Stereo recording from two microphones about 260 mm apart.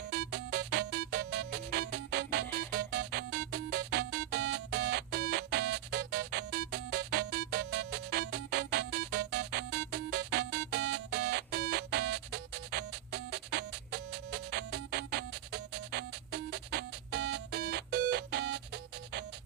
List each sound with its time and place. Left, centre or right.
0.1 s music: right